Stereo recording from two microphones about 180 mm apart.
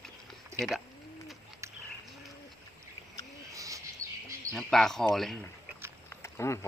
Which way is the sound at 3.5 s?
20° right (ahead or behind).